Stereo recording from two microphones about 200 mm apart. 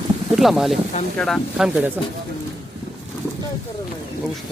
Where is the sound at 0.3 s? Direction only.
Centre (ahead or behind).